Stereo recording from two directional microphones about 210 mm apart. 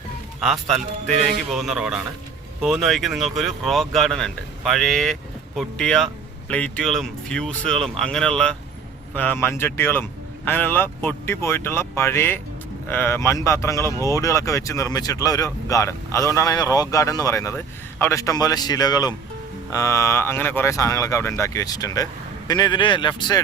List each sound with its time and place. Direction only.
0.3 s speech: centre (ahead or behind); by 23.4 s 20° left (ahead or behind)